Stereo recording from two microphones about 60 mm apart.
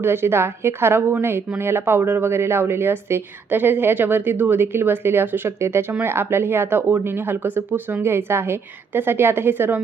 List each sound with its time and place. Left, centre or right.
0.0 s a woman's voice: right
8.0 s speech: right